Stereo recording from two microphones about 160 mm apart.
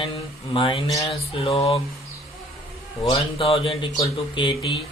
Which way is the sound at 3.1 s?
35° left (ahead or behind).